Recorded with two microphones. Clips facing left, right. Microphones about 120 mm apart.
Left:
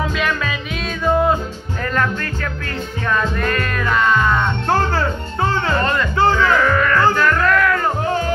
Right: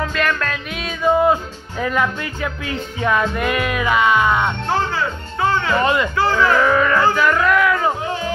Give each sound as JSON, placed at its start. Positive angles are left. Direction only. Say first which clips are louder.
{"t": 0.0, "sound": "music", "louder": "even", "side_deg": 5}
{"t": 4.6, "sound": "music", "louder": "left 2 dB", "side_deg": 45}
{"t": 5.5, "sound": "music", "louder": "right 2 dB", "side_deg": 30}
{"t": 5.8, "sound": "music", "louder": "even", "side_deg": -15}